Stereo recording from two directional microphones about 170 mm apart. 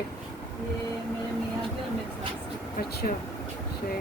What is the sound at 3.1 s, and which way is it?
Speech, 50° left (ahead or behind).